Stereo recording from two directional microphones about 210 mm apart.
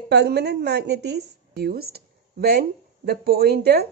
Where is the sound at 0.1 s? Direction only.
50° right (ahead or behind).